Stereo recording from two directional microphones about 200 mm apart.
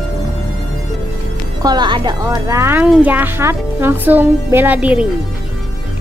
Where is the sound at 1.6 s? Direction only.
20° right (ahead or behind).